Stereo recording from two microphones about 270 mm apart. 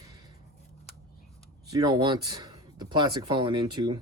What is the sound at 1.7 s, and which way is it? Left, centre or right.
Speech, centre.